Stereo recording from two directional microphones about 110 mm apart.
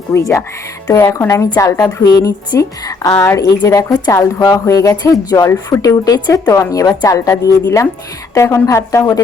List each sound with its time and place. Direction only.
0.1 s a woman's voice: 25° left (ahead or behind)
6.5 s a woman's voice: 30° left (ahead or behind)